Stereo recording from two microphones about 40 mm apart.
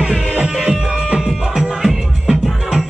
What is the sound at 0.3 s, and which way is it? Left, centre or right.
Music, right.